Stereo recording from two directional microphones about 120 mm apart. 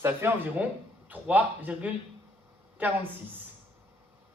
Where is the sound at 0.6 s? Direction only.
10° right (ahead or behind).